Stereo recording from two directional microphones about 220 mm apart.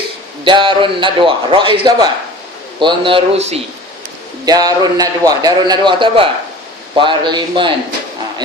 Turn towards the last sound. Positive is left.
turn(degrees=-20)  # may be behind; listen again after turning